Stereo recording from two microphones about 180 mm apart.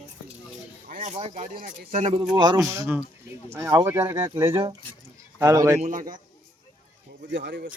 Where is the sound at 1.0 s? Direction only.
35° right (ahead or behind).